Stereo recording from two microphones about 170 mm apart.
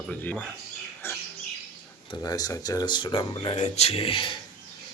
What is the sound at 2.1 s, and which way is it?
Speech, 20° left (ahead or behind).